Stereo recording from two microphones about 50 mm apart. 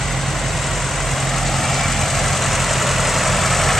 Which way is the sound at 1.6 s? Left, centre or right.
Centre.